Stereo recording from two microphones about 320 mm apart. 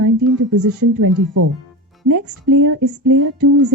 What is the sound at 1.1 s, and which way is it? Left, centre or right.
Speech, right.